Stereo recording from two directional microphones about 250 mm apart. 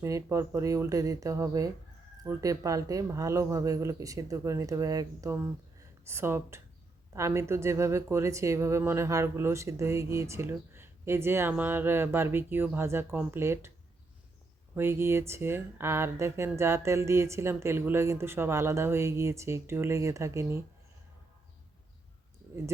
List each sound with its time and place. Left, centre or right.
0.0 s speech: centre
14.8 s speech: centre